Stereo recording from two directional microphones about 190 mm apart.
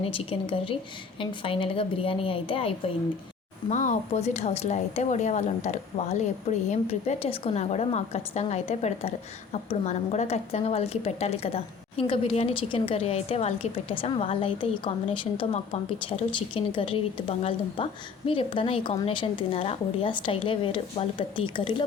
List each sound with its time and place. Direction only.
0.0 s a woman's voice: 25° left (ahead or behind)
3.7 s a woman's voice: 40° left (ahead or behind)